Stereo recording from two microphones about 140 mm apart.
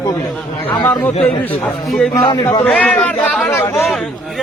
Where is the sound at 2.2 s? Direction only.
30° left (ahead or behind).